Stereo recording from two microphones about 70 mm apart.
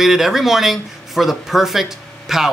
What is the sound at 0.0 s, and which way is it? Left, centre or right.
Speech, centre.